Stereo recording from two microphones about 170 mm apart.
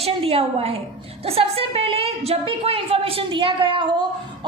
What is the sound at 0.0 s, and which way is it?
A woman's voice, 35° right (ahead or behind).